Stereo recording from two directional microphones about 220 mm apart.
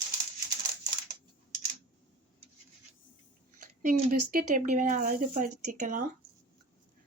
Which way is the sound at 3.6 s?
40° right (ahead or behind).